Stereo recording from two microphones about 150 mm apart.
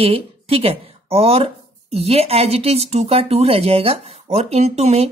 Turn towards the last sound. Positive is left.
turn(degrees=-45)  # may be behind; listen again after turning